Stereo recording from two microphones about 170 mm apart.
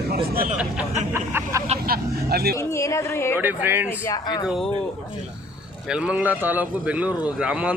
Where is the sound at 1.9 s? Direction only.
65° right (ahead or behind).